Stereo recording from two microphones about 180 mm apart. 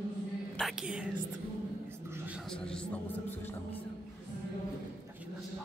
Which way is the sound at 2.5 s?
5° left (ahead or behind).